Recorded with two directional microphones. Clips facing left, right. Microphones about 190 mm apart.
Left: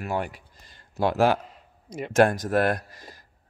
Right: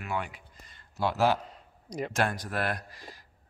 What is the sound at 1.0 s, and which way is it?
A man's voice, 55° left (ahead or behind).